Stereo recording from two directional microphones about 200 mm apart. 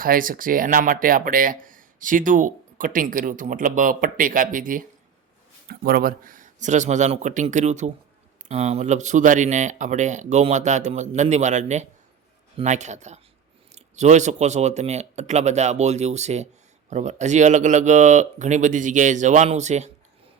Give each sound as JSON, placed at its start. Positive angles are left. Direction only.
{"t": 0.0, "sound": "speech", "side_deg": -45}